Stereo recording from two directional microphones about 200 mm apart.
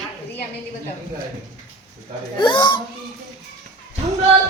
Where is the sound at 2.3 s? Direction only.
25° left (ahead or behind).